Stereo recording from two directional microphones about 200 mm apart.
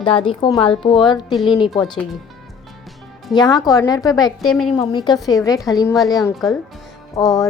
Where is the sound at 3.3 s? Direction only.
20° left (ahead or behind).